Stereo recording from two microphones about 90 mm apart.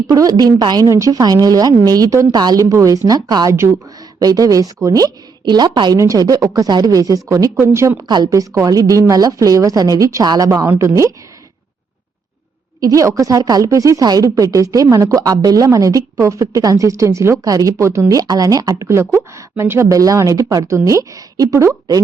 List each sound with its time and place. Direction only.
0.1 s a woman's voice: 45° right (ahead or behind)
0.9 s a woman's voice: 35° right (ahead or behind); by 6.0 s 55° right (ahead or behind)
6.0 s a woman's voice: 40° right (ahead or behind)
8.0 s a woman's voice: 55° right (ahead or behind)
8.3 s a woman's voice: 40° right (ahead or behind)
10.7 s a woman's voice: 30° right (ahead or behind)
12.8 s a woman's voice: 40° right (ahead or behind)
18.1 s a woman's voice: 45° right (ahead or behind)
19.9 s a woman's voice: 40° right (ahead or behind)